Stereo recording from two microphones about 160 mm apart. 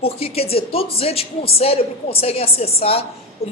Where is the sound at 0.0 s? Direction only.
40° left (ahead or behind).